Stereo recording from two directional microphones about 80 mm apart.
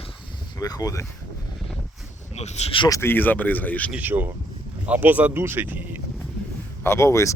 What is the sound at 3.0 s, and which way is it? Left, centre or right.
Speech, left.